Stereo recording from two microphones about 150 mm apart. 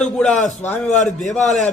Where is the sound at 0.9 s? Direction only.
55° left (ahead or behind).